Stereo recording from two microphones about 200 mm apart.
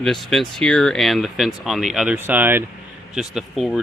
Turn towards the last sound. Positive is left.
turn(degrees=0)  # may be behind; listen again after turning